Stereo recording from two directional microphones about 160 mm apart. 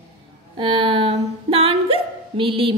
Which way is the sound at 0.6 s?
35° right (ahead or behind).